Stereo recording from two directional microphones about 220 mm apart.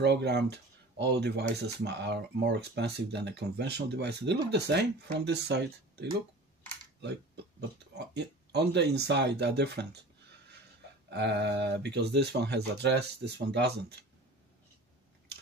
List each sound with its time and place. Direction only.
0.0 s speech: 50° right (ahead or behind)
8.0 s speech: 50° right (ahead or behind)
11.1 s speech: 50° right (ahead or behind)